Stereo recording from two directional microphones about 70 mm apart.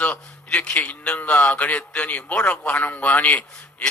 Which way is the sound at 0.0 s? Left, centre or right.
Left.